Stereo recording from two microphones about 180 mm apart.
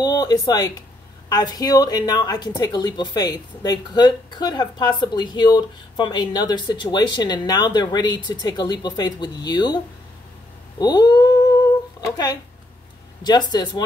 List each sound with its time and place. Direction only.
0.0 s speech: 25° left (ahead or behind)
10.8 s cat: 25° left (ahead or behind)
13.2 s speech: 25° left (ahead or behind)